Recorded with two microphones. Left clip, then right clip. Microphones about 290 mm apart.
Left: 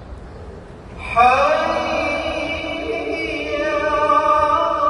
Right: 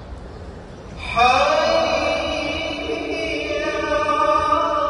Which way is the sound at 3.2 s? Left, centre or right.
Centre.